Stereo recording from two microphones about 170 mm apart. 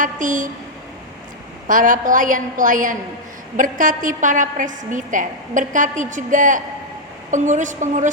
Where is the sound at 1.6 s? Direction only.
50° right (ahead or behind).